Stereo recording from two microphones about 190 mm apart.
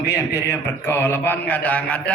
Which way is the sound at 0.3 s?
15° left (ahead or behind).